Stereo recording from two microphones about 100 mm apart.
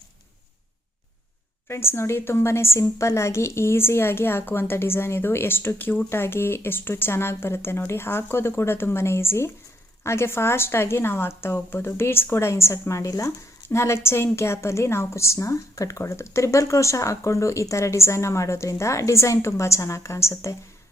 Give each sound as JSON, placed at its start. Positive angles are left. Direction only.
{"t": 1.6, "sound": "a woman's voice", "side_deg": 25}